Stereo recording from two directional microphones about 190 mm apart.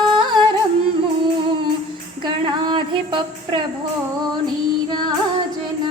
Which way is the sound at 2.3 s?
25° right (ahead or behind).